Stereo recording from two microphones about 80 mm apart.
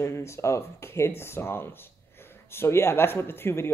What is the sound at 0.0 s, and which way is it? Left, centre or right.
Speech, left.